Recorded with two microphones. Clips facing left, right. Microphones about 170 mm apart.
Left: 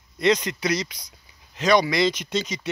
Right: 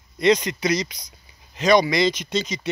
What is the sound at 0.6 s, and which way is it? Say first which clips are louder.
Speech: right 2 dB; 5° left (ahead or behind).